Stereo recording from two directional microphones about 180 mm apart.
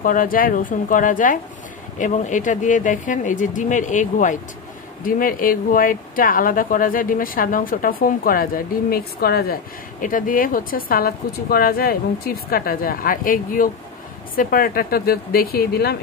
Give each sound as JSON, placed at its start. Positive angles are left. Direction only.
{"t": 0.0, "sound": "speech", "side_deg": 50}